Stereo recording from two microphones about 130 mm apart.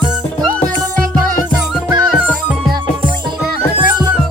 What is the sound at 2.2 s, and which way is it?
Music, 10° right (ahead or behind).